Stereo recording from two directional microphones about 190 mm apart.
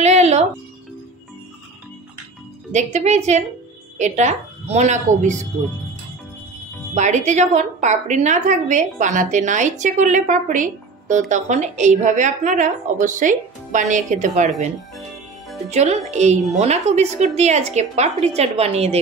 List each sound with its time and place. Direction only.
0.0 s music: 35° right (ahead or behind)
2.7 s a woman's voice: 40° right (ahead or behind)
7.0 s a woman's voice: 40° right (ahead or behind)
15.7 s a woman's voice: 35° right (ahead or behind)